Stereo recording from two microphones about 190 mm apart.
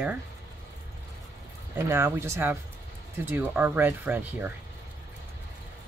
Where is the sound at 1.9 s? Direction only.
10° right (ahead or behind).